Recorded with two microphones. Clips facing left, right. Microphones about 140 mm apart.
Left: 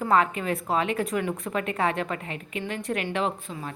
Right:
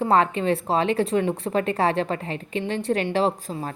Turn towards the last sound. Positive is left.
turn(degrees=-35)  # may be behind; listen again after turning